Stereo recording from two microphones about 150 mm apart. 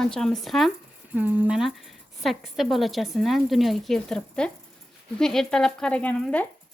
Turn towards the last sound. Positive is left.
turn(degrees=10)  # may be behind; listen again after turning